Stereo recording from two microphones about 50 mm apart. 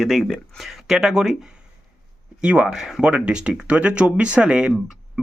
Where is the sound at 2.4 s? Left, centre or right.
Right.